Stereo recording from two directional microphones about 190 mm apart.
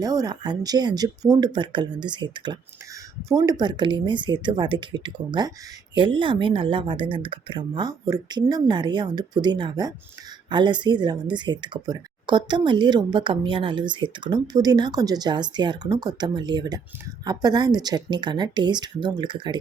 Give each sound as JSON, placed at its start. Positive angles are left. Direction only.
{"t": 0.0, "sound": "speech", "side_deg": -20}